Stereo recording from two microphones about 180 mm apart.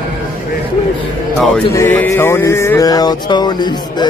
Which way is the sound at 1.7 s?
15° left (ahead or behind).